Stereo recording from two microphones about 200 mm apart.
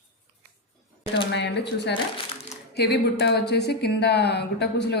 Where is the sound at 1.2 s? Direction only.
60° left (ahead or behind).